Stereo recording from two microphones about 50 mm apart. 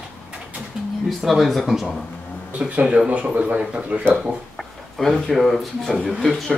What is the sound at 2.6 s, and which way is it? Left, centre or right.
Speech, right.